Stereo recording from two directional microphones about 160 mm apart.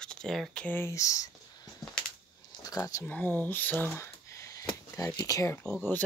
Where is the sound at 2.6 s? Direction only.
20° left (ahead or behind).